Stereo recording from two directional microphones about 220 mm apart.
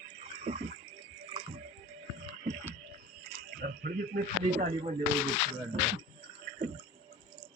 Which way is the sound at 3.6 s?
45° right (ahead or behind).